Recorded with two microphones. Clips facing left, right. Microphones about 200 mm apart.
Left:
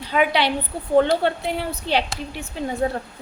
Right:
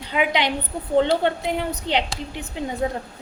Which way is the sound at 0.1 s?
15° right (ahead or behind).